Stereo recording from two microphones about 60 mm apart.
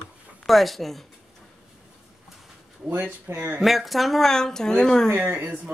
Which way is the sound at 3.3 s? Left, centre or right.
Right.